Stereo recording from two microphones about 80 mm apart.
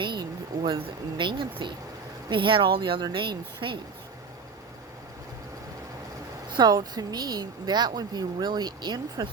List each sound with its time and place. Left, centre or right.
0.0 s a woman's voice: right
6.5 s speech: right